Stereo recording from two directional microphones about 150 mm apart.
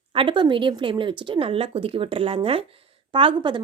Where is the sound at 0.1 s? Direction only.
35° right (ahead or behind).